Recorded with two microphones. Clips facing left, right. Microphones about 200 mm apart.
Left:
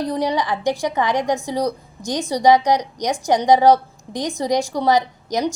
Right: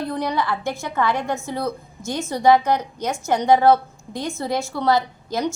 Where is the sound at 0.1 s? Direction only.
15° left (ahead or behind).